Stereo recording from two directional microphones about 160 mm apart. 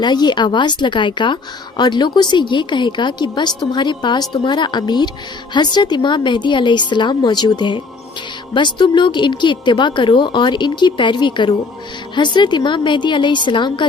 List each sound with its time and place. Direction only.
0.0 s a woman's voice: 25° left (ahead or behind)